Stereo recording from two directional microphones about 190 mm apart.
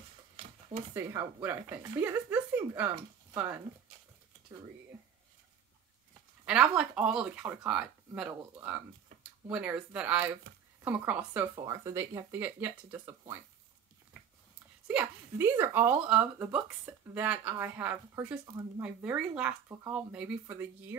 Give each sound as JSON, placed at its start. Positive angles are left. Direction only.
{"t": 0.9, "sound": "speech", "side_deg": -10}
{"t": 6.4, "sound": "speech", "side_deg": -5}
{"t": 9.5, "sound": "speech", "side_deg": -5}
{"t": 11.5, "sound": "speech", "side_deg": -20}
{"t": 14.9, "sound": "speech", "side_deg": -10}